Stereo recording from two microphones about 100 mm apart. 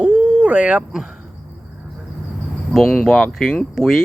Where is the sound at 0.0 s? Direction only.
15° right (ahead or behind).